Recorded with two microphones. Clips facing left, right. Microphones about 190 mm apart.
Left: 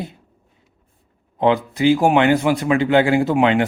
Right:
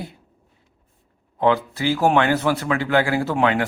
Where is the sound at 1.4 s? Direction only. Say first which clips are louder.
Left 3 dB; 20° left (ahead or behind).